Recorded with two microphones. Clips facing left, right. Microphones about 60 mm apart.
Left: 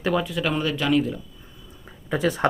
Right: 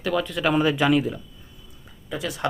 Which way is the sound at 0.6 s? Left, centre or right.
Centre.